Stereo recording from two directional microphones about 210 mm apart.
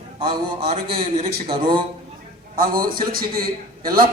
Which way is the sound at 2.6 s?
45° right (ahead or behind).